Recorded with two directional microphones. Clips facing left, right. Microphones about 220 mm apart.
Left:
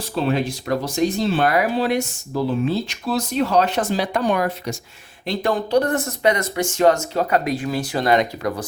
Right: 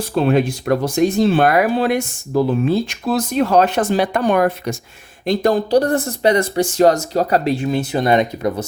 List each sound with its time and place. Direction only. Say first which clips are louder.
0.2 s speech: right 5 dB; 55° right (ahead or behind)
5.2 s speech: right 6 dB; 45° right (ahead or behind); by 8.6 s 20° right (ahead or behind)